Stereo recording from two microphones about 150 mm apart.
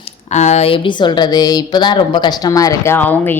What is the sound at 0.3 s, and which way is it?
Speech, 50° left (ahead or behind).